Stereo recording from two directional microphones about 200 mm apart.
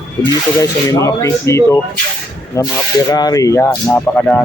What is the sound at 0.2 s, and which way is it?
Speech, 15° left (ahead or behind).